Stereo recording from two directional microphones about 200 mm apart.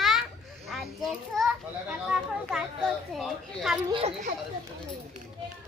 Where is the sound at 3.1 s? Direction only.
Centre (ahead or behind).